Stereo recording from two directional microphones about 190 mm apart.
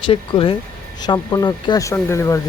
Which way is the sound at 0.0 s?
25° left (ahead or behind).